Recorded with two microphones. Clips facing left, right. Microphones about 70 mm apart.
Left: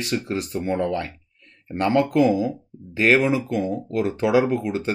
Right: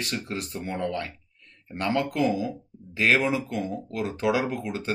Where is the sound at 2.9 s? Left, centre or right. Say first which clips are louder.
Left 5 dB; left.